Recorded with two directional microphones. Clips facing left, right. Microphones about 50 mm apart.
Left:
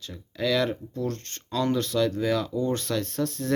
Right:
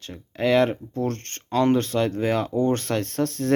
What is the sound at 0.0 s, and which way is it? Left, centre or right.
Speech, right.